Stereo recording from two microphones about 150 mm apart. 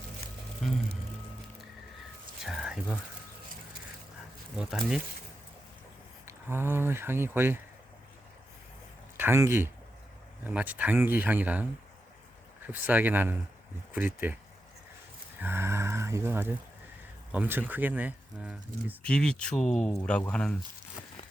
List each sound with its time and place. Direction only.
2.4 s a sound: 5° right (ahead or behind)
4.5 s speech: 5° right (ahead or behind)
6.2 s speech: 15° right (ahead or behind)
9.1 s speech: 15° right (ahead or behind)
12.7 s speech: 10° right (ahead or behind)
15.4 s speech: 15° right (ahead or behind)
19.0 s speech: 5° left (ahead or behind)